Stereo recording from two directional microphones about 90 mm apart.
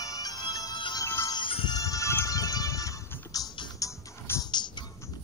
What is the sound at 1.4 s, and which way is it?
Music, 70° left (ahead or behind).